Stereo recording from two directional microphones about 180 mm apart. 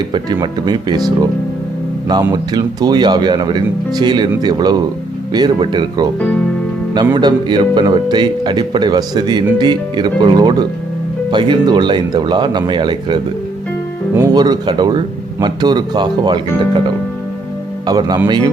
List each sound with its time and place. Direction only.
0.1 s speech: 25° right (ahead or behind)
17.8 s speech: 20° right (ahead or behind)